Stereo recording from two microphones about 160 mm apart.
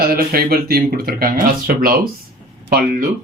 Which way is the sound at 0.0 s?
70° right (ahead or behind).